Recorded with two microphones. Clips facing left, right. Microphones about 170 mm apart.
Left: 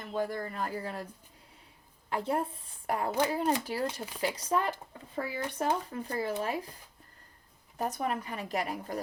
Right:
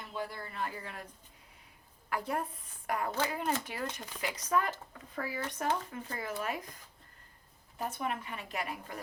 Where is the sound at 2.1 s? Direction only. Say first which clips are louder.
Left 4 dB; 25° left (ahead or behind).